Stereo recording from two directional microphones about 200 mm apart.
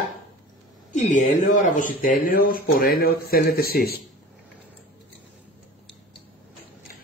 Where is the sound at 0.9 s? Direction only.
35° left (ahead or behind); by 4.0 s 50° left (ahead or behind).